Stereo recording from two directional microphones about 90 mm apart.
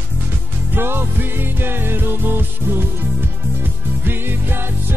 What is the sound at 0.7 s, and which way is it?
Music, 25° right (ahead or behind).